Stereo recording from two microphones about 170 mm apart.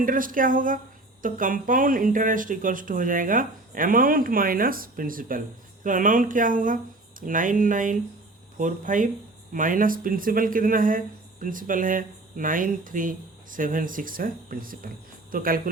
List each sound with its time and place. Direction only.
0.0 s speech: 55° right (ahead or behind)